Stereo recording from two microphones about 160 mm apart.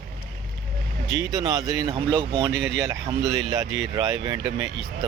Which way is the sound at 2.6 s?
90° right.